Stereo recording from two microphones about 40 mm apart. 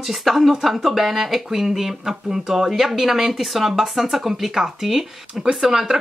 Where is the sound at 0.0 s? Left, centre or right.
Centre.